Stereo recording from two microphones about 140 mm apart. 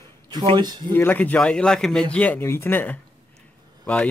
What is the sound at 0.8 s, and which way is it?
Speech, 15° left (ahead or behind).